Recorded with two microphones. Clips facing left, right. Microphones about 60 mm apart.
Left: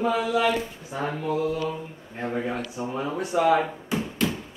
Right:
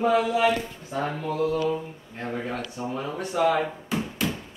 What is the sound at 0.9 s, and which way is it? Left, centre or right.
A woman's voice, centre.